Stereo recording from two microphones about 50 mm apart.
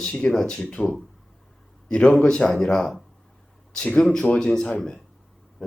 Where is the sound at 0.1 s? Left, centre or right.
Left.